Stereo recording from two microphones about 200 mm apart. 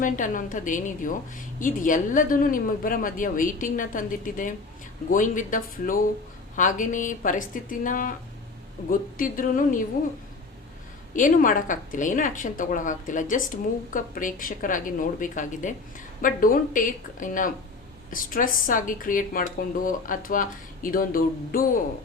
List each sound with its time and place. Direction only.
0.0 s speech: 40° left (ahead or behind)
11.1 s a woman's voice: 40° left (ahead or behind)